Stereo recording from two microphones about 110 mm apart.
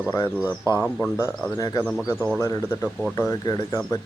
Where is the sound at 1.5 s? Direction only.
35° left (ahead or behind).